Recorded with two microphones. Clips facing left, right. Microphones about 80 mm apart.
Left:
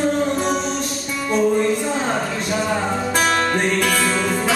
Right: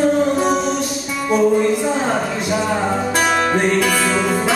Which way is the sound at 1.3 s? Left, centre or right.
Centre.